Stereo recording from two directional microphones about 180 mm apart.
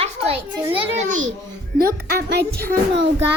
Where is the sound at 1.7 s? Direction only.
60° right (ahead or behind).